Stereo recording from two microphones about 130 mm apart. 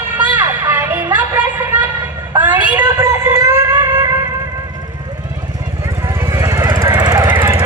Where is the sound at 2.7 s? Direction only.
20° right (ahead or behind).